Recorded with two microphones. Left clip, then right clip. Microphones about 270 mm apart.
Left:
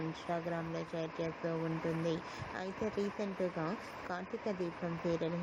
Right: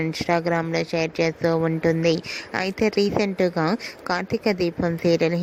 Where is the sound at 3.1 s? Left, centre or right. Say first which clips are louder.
Right 16 dB; right.